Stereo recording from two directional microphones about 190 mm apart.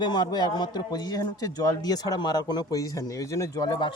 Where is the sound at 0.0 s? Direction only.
20° left (ahead or behind).